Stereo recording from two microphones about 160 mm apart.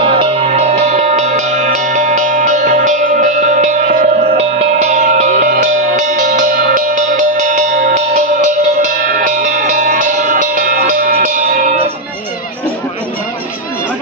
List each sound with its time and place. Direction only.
0.0 s music: 35° right (ahead or behind)